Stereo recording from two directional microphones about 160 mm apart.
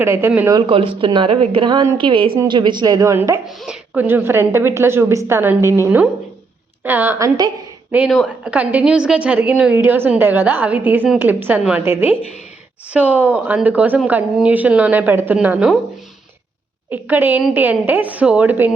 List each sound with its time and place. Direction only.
0.0 s a woman's voice: 15° right (ahead or behind)
0.5 s a woman's voice: 35° right (ahead or behind); by 3.4 s 15° right (ahead or behind)
3.4 s a woman's voice: 5° right (ahead or behind)
6.8 s a woman's voice: 10° right (ahead or behind)
16.9 s a woman's voice: 10° right (ahead or behind)